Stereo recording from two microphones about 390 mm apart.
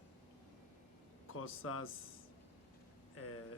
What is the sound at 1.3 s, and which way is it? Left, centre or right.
Speech, left.